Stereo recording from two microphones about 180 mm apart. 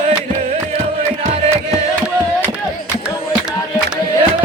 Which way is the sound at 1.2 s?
35° right (ahead or behind).